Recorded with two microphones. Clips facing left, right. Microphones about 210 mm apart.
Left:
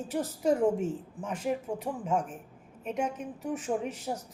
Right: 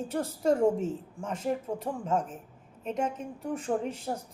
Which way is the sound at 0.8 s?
5° left (ahead or behind).